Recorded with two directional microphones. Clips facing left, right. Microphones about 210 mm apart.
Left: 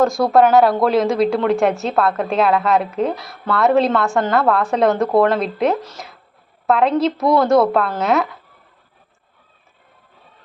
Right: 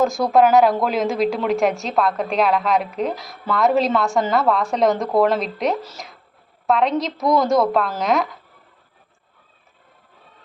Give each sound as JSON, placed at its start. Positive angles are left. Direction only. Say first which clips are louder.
{"t": 0.0, "sound": "a woman's voice", "louder": "left 2 dB", "side_deg": 0}